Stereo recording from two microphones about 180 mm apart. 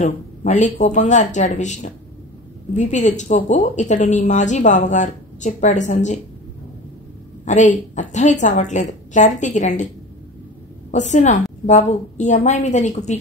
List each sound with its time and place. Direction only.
0.0 s a woman's voice: 40° left (ahead or behind)
7.4 s a woman's voice: 45° left (ahead or behind)
10.9 s a woman's voice: 40° left (ahead or behind)